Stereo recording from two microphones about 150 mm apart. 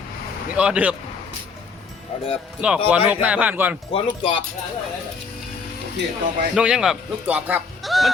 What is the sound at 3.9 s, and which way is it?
Speech, 35° left (ahead or behind).